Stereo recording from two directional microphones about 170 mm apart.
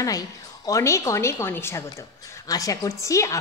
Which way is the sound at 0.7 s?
15° left (ahead or behind).